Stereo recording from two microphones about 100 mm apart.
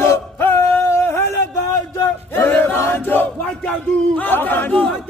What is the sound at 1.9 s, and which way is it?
Battle cry, 25° left (ahead or behind).